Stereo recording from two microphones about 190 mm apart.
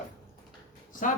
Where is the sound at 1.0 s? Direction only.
40° left (ahead or behind).